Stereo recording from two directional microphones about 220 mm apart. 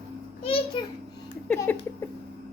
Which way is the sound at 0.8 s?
20° left (ahead or behind).